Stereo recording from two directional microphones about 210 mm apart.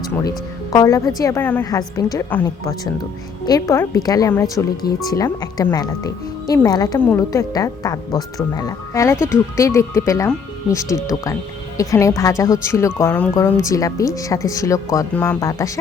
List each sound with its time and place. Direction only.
0.1 s speech: 15° left (ahead or behind)